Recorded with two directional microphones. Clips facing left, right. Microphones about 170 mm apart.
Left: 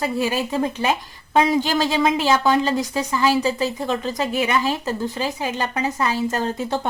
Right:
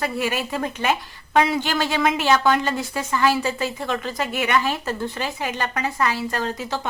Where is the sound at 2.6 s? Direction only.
35° left (ahead or behind).